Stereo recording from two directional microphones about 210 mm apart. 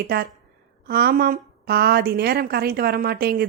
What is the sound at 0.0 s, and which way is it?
A woman's voice, 50° right (ahead or behind).